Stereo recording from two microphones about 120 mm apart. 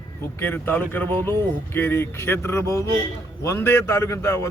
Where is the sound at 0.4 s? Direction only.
15° left (ahead or behind).